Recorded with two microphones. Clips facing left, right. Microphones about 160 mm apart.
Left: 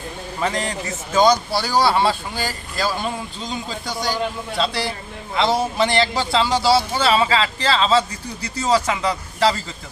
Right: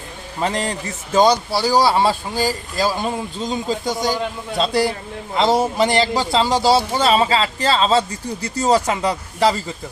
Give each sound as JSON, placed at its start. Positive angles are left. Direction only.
{"t": 0.3, "sound": "speech", "side_deg": -30}
{"t": 2.4, "sound": "speech", "side_deg": -15}
{"t": 3.0, "sound": "speech", "side_deg": -45}